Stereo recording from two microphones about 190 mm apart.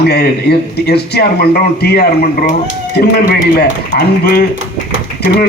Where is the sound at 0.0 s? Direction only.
60° left (ahead or behind).